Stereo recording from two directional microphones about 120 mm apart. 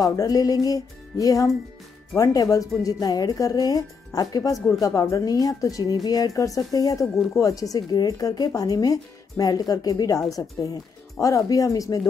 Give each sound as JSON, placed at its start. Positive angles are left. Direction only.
{"t": 0.0, "sound": "a woman's voice", "side_deg": 30}